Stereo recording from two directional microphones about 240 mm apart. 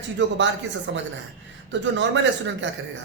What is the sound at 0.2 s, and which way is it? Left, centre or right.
A man's voice, right.